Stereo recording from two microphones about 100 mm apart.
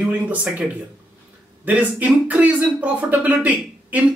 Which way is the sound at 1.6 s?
15° right (ahead or behind).